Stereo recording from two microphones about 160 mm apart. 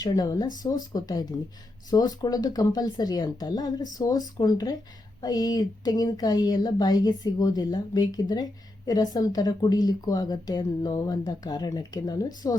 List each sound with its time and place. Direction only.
0.0 s a woman's voice: 25° left (ahead or behind)